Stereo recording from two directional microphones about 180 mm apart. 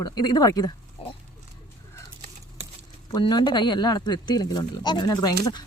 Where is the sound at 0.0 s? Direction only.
20° left (ahead or behind).